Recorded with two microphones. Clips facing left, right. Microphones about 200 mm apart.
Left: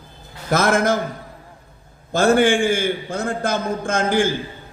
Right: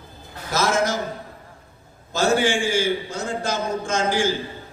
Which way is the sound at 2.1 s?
55° left (ahead or behind).